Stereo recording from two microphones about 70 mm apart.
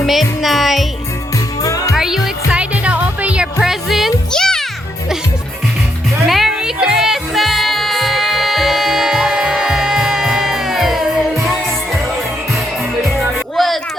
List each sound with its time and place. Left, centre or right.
0.0 s music: centre
1.6 s music: left
2.0 s music: centre
3.6 s music: centre
4.3 s music: centre
6.2 s music: centre
13.1 s music: centre